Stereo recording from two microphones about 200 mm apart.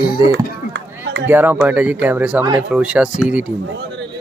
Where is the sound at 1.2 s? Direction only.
10° right (ahead or behind).